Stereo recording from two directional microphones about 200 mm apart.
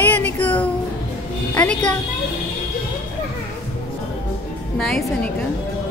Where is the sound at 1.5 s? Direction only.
10° left (ahead or behind).